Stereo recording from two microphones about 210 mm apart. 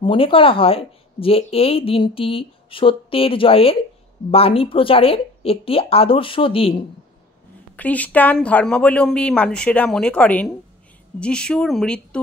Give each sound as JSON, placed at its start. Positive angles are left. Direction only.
{"t": 0.0, "sound": "speech", "side_deg": 25}
{"t": 7.7, "sound": "speech", "side_deg": 5}